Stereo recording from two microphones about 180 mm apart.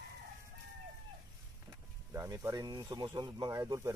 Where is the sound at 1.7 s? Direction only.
20° right (ahead or behind).